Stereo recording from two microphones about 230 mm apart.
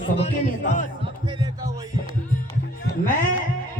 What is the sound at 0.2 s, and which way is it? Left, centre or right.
Speech, left.